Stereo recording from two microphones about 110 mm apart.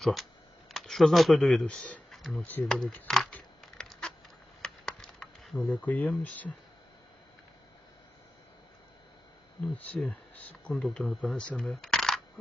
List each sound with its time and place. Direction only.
0.0 s speech: centre (ahead or behind)
2.5 s speech: 15° left (ahead or behind)
3.1 s a sound: 5° left (ahead or behind)
6.2 s speech: 15° left (ahead or behind)
9.7 s speech: 15° left (ahead or behind)
10.7 s speech: 5° left (ahead or behind)
11.2 s speech: 10° left (ahead or behind)